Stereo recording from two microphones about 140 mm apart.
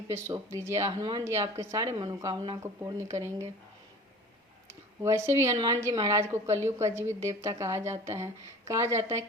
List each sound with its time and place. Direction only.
0.1 s a woman's voice: 20° right (ahead or behind)
4.7 s a woman's voice: 20° right (ahead or behind)